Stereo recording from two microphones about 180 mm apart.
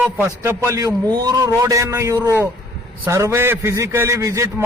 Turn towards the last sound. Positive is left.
turn(degrees=-15)  # may be behind; listen again after turning